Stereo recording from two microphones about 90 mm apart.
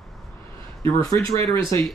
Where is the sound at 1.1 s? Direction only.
70° right (ahead or behind).